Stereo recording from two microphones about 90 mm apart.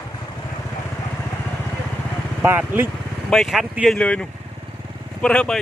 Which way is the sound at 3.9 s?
10° left (ahead or behind).